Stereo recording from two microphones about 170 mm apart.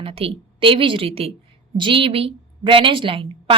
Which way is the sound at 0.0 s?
35° right (ahead or behind).